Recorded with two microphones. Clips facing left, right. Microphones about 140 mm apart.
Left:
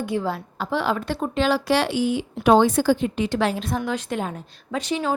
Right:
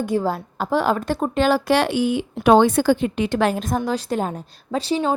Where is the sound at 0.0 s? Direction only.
40° right (ahead or behind).